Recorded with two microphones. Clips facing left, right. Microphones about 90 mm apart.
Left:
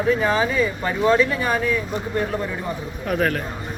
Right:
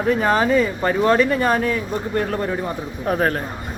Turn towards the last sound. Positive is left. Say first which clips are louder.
# right 2 dB
turn(degrees=-35)  # may be behind; listen again after turning